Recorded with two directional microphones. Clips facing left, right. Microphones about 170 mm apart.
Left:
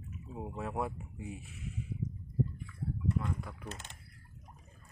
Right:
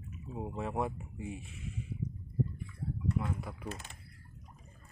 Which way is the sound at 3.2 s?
10° right (ahead or behind).